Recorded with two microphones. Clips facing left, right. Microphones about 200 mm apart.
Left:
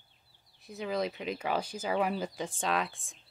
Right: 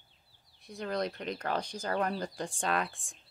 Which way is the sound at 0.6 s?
5° left (ahead or behind).